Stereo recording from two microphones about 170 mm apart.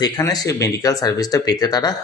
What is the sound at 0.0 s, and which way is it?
A man's voice, 20° left (ahead or behind).